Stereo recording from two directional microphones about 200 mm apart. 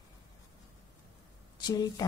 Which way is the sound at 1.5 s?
20° left (ahead or behind).